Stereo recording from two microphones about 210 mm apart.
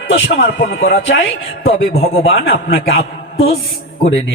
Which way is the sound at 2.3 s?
45° left (ahead or behind).